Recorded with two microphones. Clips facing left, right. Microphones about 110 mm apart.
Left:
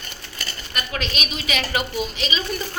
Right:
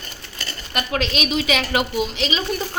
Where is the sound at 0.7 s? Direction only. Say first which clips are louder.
Right 5 dB; 90° right.